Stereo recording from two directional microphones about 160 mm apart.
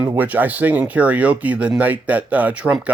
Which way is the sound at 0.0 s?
10° right (ahead or behind).